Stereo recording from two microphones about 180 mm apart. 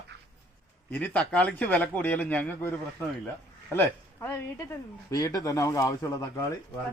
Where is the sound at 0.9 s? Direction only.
10° left (ahead or behind).